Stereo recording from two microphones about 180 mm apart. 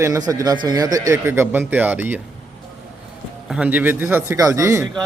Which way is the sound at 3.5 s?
10° right (ahead or behind).